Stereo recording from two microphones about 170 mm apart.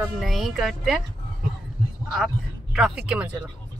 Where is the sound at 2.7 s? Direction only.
5° right (ahead or behind).